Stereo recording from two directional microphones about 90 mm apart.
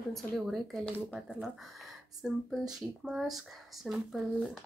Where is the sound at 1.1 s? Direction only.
5° right (ahead or behind).